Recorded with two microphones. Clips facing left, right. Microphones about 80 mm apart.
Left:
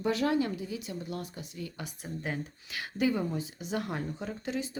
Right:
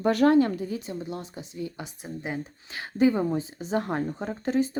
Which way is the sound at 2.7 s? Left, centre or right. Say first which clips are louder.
Right 7 dB; right.